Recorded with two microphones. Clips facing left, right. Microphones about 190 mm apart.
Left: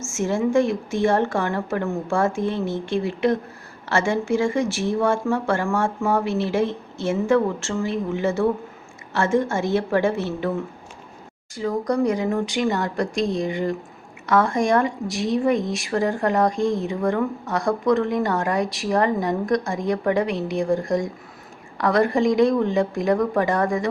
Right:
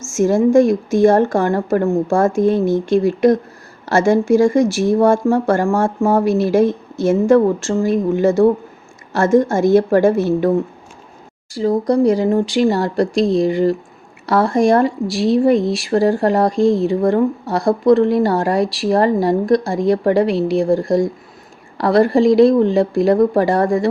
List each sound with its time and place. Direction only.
0.2 s speech: 40° right (ahead or behind)
11.5 s speech: 35° right (ahead or behind)